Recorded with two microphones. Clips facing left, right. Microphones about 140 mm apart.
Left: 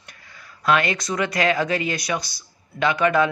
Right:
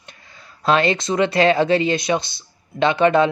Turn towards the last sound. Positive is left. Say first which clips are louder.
# right 4 dB
turn(degrees=-25)  # may be behind; listen again after turning